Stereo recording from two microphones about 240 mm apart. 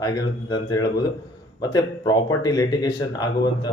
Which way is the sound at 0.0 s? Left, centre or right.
Centre.